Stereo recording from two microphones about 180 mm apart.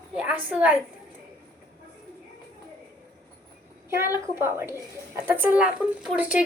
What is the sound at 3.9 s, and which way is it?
A woman's voice, 15° right (ahead or behind).